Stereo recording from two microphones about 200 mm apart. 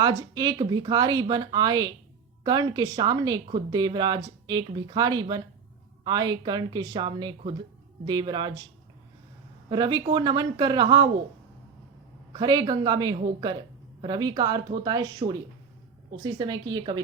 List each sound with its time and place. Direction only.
0.0 s speech: 20° right (ahead or behind)
9.6 s speech: 20° right (ahead or behind)
12.3 s speech: 20° right (ahead or behind)